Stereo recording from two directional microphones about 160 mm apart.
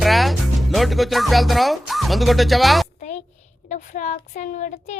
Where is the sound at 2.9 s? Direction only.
45° left (ahead or behind).